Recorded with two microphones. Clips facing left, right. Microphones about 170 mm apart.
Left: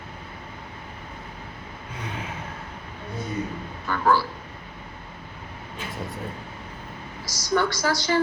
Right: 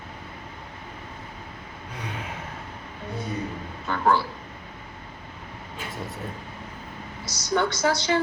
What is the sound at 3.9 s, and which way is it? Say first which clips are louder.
Speech: left 1 dB; 25° right (ahead or behind).